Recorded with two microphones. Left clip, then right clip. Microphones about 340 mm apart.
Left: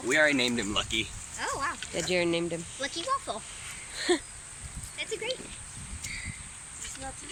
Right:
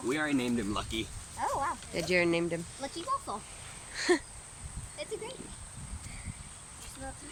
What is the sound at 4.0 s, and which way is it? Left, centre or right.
Speech, centre.